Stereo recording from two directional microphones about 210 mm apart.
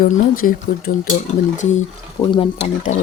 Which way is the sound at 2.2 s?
15° left (ahead or behind).